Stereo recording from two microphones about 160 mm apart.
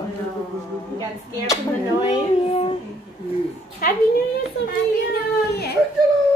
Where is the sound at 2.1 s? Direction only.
35° left (ahead or behind).